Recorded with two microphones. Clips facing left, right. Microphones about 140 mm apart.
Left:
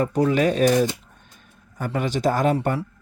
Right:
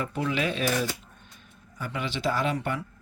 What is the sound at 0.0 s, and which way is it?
Speech, 40° left (ahead or behind).